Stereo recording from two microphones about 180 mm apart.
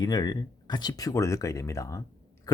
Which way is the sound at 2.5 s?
20° left (ahead or behind).